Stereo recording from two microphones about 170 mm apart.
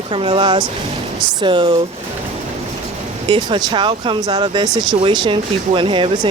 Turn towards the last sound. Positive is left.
turn(degrees=-30)  # may be behind; listen again after turning